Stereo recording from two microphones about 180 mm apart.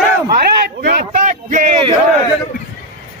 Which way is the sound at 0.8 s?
50° right (ahead or behind).